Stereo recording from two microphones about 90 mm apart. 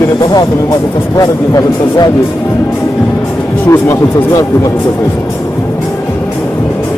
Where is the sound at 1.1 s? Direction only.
45° left (ahead or behind).